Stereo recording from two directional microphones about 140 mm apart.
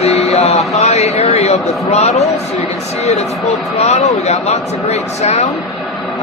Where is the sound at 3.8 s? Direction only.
50° left (ahead or behind).